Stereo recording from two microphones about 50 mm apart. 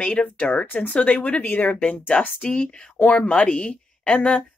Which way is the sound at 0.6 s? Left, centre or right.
Left.